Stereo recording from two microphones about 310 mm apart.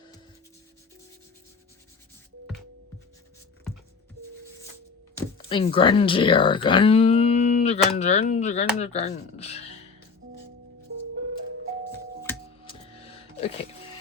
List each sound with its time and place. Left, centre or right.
5.5 s speech: centre
12.2 s music: centre
13.1 s music: centre